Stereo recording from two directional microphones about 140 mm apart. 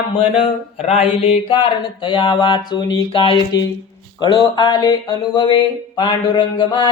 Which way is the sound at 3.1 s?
40° left (ahead or behind).